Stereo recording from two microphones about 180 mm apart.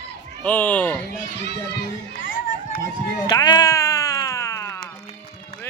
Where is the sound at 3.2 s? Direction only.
25° left (ahead or behind).